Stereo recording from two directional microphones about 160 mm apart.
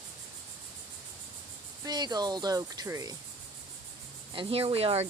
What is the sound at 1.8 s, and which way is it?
Speech, 25° right (ahead or behind).